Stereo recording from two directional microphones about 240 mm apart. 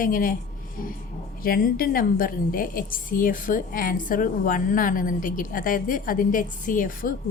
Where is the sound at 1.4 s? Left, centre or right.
Left.